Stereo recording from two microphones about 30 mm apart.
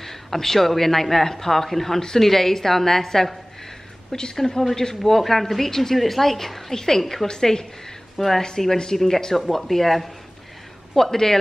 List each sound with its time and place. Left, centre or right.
0.0 s a man's voice: centre
7.2 s a woman's voice: left